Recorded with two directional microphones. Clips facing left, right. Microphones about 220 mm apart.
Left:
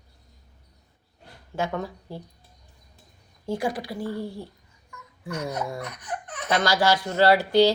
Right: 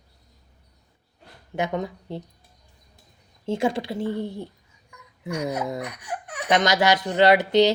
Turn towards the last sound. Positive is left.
turn(degrees=-20)  # may be behind; listen again after turning